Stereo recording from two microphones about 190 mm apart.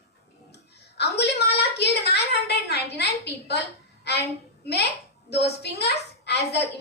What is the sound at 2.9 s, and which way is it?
Speech, 60° left (ahead or behind).